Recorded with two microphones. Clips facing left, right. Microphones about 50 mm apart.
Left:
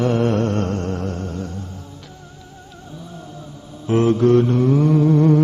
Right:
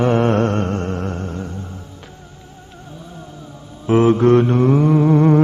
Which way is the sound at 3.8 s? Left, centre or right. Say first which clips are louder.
Right 3 dB; right.